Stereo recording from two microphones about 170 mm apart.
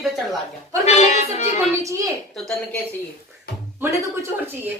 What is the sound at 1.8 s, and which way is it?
Speech, 20° right (ahead or behind).